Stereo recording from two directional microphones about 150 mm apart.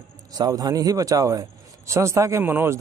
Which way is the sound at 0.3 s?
25° right (ahead or behind).